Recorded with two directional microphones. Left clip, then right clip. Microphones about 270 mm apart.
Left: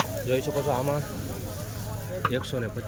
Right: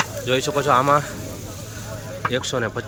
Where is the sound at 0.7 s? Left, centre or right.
Right.